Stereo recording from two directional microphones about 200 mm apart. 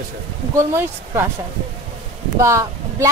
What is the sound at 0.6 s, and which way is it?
Speech, 10° right (ahead or behind).